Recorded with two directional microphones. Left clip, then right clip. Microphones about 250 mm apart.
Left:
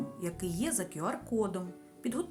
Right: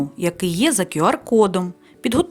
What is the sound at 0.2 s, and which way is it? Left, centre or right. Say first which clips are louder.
Speech: right 18 dB; left.